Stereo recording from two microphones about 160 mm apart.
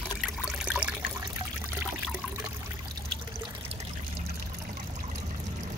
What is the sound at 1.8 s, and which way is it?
Trickle, 10° right (ahead or behind).